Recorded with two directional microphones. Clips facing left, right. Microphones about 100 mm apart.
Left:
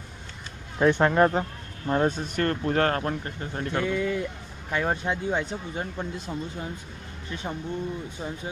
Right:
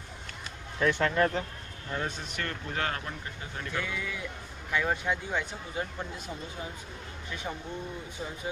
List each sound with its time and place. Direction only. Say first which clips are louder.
0.7 s speech: left 6 dB; 40° left (ahead or behind)
7.5 s speech: left 4 dB; 25° left (ahead or behind)